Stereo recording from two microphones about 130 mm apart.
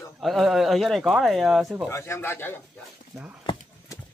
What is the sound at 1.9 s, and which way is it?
Speech, 20° left (ahead or behind).